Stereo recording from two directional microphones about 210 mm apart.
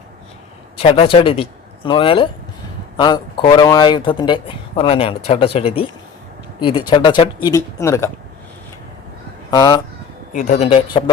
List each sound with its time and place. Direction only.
0.8 s speech: 25° left (ahead or behind)
9.5 s speech: 20° left (ahead or behind)
10.3 s speech: 35° left (ahead or behind)